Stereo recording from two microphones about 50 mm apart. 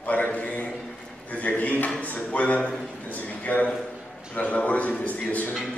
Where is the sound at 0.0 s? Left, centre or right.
Left.